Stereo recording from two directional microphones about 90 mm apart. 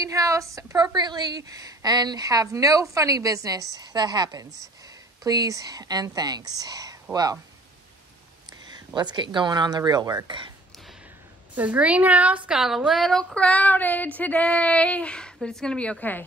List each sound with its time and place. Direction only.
0.0 s a woman's voice: 40° right (ahead or behind)
0.9 s a woman's voice: 50° right (ahead or behind)
8.5 s speech: 50° right (ahead or behind)
11.5 s speech: 15° right (ahead or behind)
12.4 s female singing: 5° right (ahead or behind); by 16.3 s 20° left (ahead or behind)